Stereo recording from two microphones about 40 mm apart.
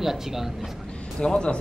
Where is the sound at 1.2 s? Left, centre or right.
Left.